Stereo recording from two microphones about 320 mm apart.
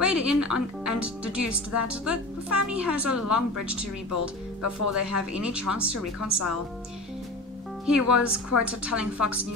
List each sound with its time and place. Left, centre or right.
0.0 s a woman's voice: centre
4.1 s speech: right
5.3 s a woman's voice: centre
6.2 s speech: right
7.8 s a woman's voice: centre